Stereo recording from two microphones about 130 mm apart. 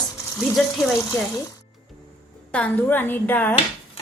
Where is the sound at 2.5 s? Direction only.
10° left (ahead or behind).